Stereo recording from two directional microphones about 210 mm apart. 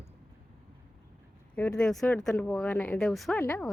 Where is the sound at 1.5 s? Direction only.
5° left (ahead or behind).